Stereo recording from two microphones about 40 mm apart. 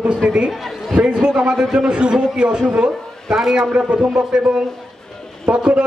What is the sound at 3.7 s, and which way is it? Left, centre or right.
A man's voice, right.